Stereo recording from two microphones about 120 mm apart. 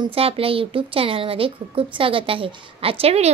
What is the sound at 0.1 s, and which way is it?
A child's voice, 55° right (ahead or behind).